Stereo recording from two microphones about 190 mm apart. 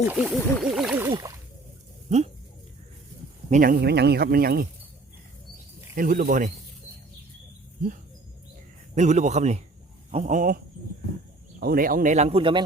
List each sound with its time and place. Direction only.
0.1 s a sound: 5° right (ahead or behind)
2.0 s speech: 35° right (ahead or behind)
3.5 s speech: 50° right (ahead or behind)
6.0 s speech: 45° right (ahead or behind)
9.0 s speech: 40° right (ahead or behind)
11.6 s speech: 50° right (ahead or behind); by 12.6 s 25° right (ahead or behind)